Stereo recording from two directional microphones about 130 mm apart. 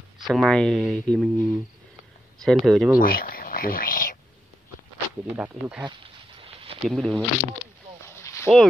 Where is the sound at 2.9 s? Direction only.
90° left.